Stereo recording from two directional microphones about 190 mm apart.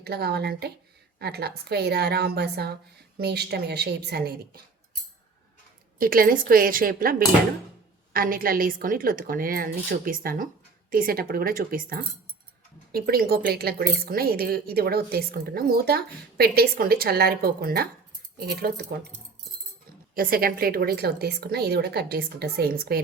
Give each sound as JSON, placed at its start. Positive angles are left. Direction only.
{"t": 0.0, "sound": "a woman's voice", "side_deg": -55}
{"t": 6.0, "sound": "a woman's voice", "side_deg": -50}
{"t": 20.1, "sound": "a woman's voice", "side_deg": -50}